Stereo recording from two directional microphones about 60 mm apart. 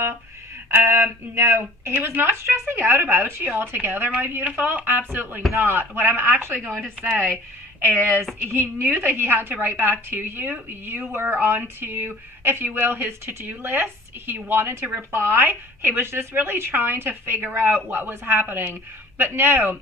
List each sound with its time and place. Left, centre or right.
0.7 s a woman's voice: right
8.4 s a woman's voice: right